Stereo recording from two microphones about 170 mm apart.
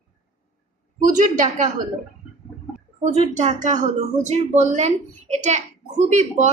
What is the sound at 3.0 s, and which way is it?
A woman's voice, 45° right (ahead or behind).